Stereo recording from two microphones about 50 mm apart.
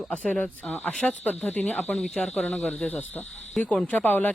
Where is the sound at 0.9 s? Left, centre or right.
Centre.